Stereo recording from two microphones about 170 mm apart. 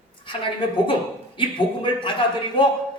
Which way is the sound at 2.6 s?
30° left (ahead or behind).